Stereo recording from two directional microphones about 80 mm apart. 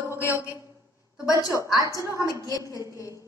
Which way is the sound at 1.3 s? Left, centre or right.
Left.